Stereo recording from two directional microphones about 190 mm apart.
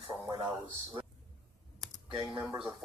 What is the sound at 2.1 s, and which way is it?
Speech, 25° right (ahead or behind).